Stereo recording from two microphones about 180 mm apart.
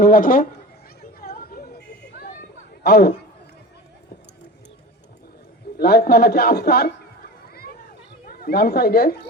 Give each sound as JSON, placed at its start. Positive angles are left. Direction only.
{"t": 0.0, "sound": "speech", "side_deg": 50}
{"t": 1.0, "sound": "a sound", "side_deg": 55}
{"t": 2.8, "sound": "a man's voice", "side_deg": 60}
{"t": 5.7, "sound": "a man's voice", "side_deg": 60}
{"t": 8.3, "sound": "a woman's voice", "side_deg": 60}